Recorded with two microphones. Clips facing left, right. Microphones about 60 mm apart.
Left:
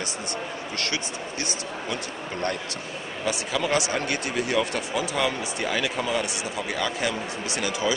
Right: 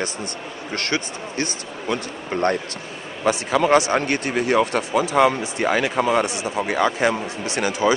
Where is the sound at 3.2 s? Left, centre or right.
Right.